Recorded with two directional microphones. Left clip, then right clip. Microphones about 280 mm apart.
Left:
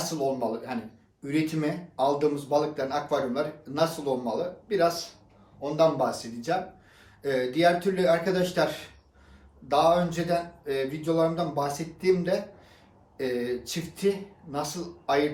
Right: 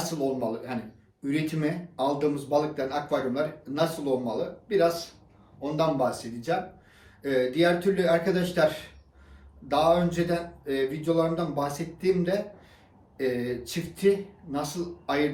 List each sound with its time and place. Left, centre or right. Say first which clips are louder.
0.0 s speech: left 1 dB; centre
9.6 s speech: left 1 dB; centre